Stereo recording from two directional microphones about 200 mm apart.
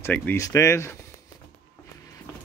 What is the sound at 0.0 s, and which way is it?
Speech, 10° left (ahead or behind).